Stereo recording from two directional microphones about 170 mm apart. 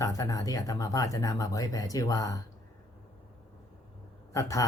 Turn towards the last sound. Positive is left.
turn(degrees=20)  # may be behind; listen again after turning